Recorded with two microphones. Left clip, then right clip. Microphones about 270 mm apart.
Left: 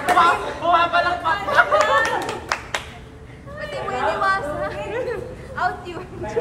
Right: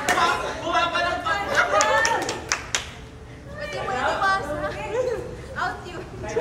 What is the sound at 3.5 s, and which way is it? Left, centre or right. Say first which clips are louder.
Chatter: left 2 dB; left.